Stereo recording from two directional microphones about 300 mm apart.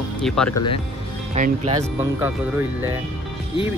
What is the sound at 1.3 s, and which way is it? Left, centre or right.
Speech, right.